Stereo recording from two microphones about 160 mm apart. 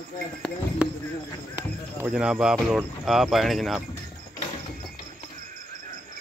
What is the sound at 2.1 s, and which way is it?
Speech, 5° right (ahead or behind).